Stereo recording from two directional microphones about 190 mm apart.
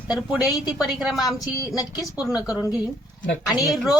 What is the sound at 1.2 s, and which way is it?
Speech, 20° left (ahead or behind).